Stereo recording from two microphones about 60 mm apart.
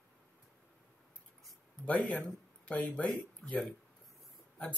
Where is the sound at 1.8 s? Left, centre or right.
Left.